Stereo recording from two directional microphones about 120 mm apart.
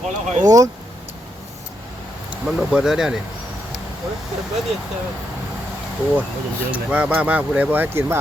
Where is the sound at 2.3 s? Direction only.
5° right (ahead or behind).